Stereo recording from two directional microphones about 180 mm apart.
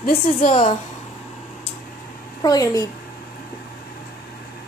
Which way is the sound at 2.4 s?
20° left (ahead or behind).